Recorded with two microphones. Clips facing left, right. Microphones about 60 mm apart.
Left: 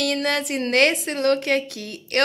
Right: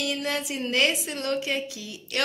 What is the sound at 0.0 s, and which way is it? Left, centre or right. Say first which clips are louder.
Speech: left 6 dB; left.